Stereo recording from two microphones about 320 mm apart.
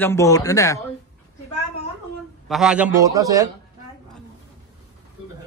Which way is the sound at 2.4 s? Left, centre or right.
Centre.